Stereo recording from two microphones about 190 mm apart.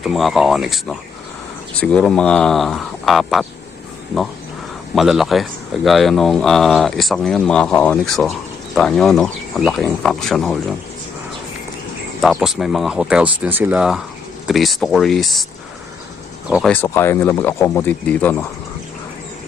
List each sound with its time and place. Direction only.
0.0 s speech: centre (ahead or behind)
4.9 s speech: centre (ahead or behind)
12.2 s speech: centre (ahead or behind)
16.5 s speech: centre (ahead or behind)
16.7 s speech: 10° left (ahead or behind)